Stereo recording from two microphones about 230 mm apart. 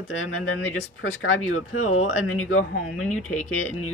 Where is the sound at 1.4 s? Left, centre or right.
Left.